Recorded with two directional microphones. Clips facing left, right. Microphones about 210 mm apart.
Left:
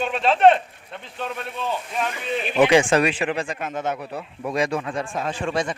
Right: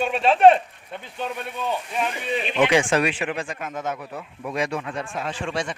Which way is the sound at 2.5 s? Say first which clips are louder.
Left 3 dB; 40° left (ahead or behind).